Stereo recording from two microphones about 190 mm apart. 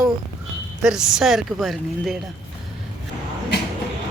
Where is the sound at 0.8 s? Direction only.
5° right (ahead or behind).